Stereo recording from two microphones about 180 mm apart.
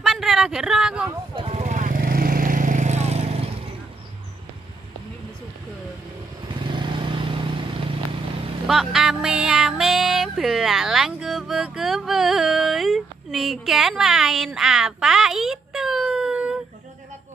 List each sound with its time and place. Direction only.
0.0 s a sound: centre (ahead or behind)
1.3 s vehicle: 35° right (ahead or behind)
6.5 s vehicle: 25° right (ahead or behind)
8.6 s music: centre (ahead or behind)